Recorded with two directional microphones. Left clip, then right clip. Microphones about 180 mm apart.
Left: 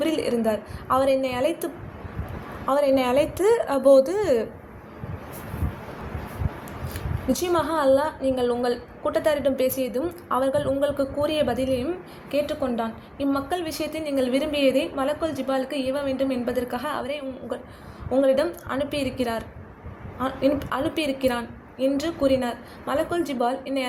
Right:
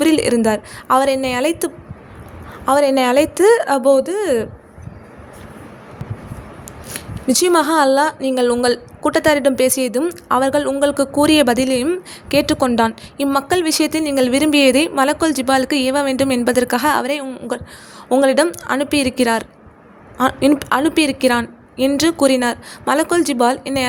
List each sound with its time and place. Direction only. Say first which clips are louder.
0.0 s a woman's voice: right 9 dB; 45° right (ahead or behind); by 4.4 s 25° right (ahead or behind)
6.9 s speech: right 9 dB; 45° right (ahead or behind)